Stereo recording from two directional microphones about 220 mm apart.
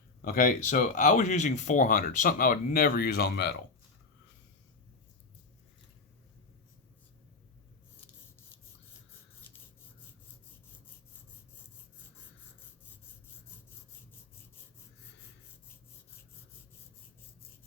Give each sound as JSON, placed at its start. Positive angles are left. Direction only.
{"t": 0.2, "sound": "speech", "side_deg": 40}
{"t": 9.5, "sound": "rub", "side_deg": 10}